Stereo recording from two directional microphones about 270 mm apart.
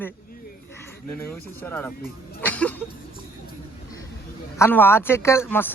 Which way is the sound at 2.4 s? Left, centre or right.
Centre.